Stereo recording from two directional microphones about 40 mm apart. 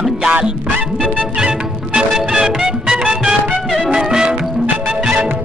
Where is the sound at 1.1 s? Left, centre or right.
Right.